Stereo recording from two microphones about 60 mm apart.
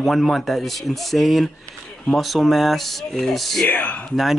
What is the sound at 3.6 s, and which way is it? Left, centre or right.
Speech, left.